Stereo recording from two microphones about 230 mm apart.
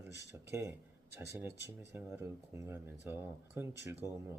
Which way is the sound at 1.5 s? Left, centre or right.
Right.